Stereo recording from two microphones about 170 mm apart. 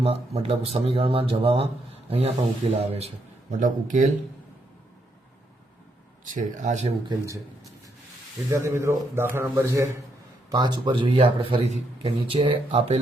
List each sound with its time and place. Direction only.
0.0 s speech: 35° right (ahead or behind)
3.5 s speech: 50° right (ahead or behind)
6.2 s speech: 50° right (ahead or behind)
8.4 s speech: 15° right (ahead or behind); by 13.0 s 35° right (ahead or behind)